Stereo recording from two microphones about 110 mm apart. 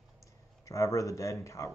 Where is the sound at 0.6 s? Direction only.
30° left (ahead or behind).